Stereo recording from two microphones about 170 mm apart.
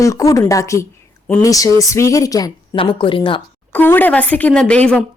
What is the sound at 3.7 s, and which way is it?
Speech, 10° left (ahead or behind).